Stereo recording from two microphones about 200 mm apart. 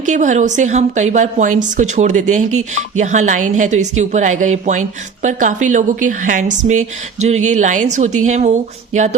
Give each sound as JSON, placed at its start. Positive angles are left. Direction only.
{"t": 0.0, "sound": "a woman's voice", "side_deg": -40}